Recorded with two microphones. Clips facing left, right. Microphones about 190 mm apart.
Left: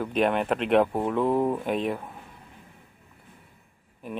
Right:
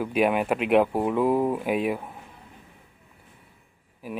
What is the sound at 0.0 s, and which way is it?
Speech, 5° right (ahead or behind).